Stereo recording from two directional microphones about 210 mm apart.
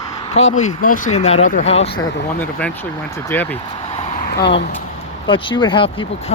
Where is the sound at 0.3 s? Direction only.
35° left (ahead or behind).